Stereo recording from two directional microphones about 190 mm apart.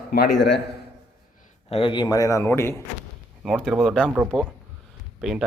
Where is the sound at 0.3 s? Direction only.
65° left (ahead or behind).